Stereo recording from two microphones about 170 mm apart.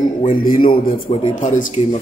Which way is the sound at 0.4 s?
55° left (ahead or behind).